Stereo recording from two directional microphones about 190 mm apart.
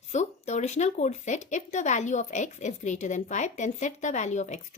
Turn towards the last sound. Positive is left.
turn(degrees=40)  # may be behind; listen again after turning